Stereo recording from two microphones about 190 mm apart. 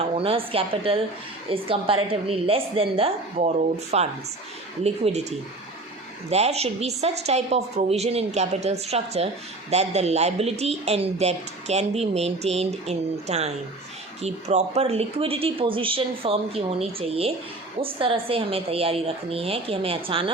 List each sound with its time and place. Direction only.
0.2 s a woman's voice: 30° right (ahead or behind)
6.3 s a woman's voice: 35° right (ahead or behind)